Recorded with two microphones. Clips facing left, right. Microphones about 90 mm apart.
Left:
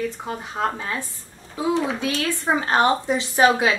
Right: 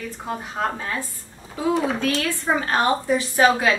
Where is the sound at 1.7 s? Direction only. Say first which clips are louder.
Right 1 dB; 5° right (ahead or behind).